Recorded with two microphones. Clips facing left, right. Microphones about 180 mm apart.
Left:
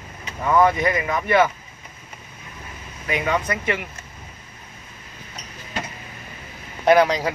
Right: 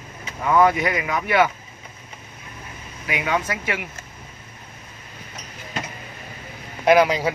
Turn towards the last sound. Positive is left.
turn(degrees=-5)  # may be behind; listen again after turning